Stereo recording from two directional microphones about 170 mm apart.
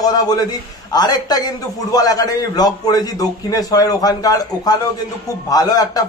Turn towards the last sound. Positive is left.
turn(degrees=20)  # may be behind; listen again after turning